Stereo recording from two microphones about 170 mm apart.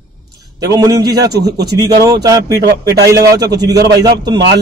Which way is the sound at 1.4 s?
75° right (ahead or behind).